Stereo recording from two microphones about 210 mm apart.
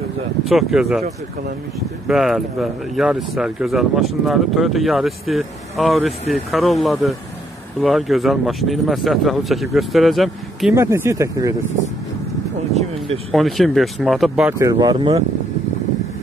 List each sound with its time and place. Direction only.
0.5 s speech: centre (ahead or behind)
2.0 s speech: centre (ahead or behind)
10.7 s speech: 15° right (ahead or behind)
13.3 s speech: centre (ahead or behind)
14.6 s speech: 20° right (ahead or behind)